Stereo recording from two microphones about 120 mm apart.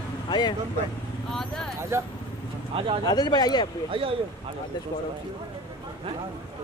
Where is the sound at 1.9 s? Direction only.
20° right (ahead or behind).